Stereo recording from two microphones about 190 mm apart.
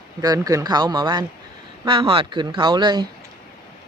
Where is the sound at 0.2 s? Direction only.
20° right (ahead or behind).